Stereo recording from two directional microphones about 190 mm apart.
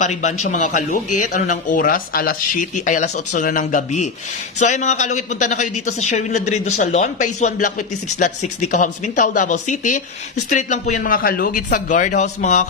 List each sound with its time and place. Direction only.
0.0 s a man's voice: 40° left (ahead or behind)